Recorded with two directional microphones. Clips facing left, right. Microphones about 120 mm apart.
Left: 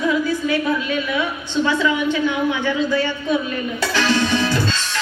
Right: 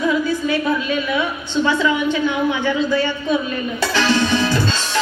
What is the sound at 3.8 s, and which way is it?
Music, 25° right (ahead or behind).